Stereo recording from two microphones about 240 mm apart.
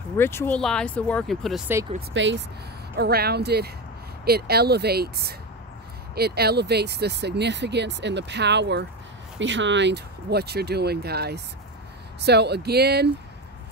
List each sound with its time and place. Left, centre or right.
0.2 s speech: centre
2.0 s speech: right